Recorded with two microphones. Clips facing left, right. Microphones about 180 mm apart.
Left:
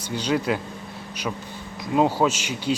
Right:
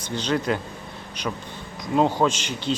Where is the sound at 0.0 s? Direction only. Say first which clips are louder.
Left 1 dB; 10° left (ahead or behind).